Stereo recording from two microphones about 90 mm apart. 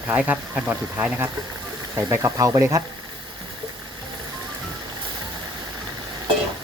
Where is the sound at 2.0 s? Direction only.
35° right (ahead or behind).